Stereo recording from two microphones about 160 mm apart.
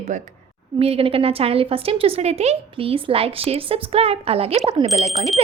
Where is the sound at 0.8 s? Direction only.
35° right (ahead or behind).